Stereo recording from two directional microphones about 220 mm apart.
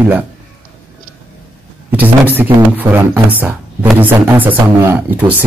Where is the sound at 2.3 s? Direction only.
10° right (ahead or behind).